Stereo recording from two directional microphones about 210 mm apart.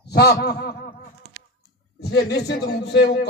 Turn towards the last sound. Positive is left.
turn(degrees=50)  # may be behind; listen again after turning